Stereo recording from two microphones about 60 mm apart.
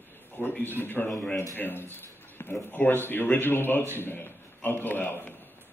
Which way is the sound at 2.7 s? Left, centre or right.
Left.